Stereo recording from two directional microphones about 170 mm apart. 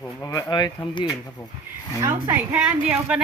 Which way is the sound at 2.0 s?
15° right (ahead or behind).